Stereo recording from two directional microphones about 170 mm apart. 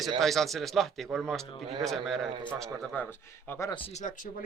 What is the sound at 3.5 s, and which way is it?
Speech, 15° left (ahead or behind).